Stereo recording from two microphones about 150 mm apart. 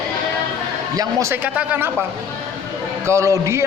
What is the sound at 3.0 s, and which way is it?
Speech, 20° right (ahead or behind).